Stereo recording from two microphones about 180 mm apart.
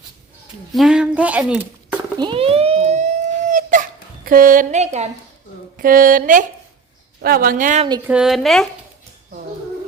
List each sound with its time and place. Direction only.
0.7 s speech: centre (ahead or behind)
2.1 s a sound: 25° right (ahead or behind); by 3.8 s 45° right (ahead or behind)
4.3 s a woman's voice: 50° right (ahead or behind)
5.7 s a woman's voice: 50° right (ahead or behind)
8.0 s a woman's voice: 5° right (ahead or behind)